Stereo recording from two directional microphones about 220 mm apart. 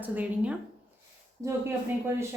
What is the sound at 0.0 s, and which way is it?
Speech, 5° right (ahead or behind).